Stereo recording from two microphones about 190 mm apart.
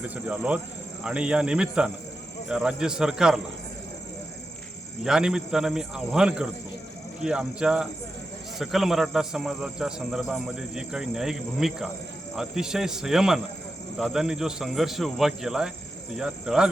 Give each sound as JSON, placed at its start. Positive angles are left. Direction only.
{"t": 0.3, "sound": "a man's voice", "side_deg": -5}
{"t": 5.0, "sound": "a man's voice", "side_deg": -5}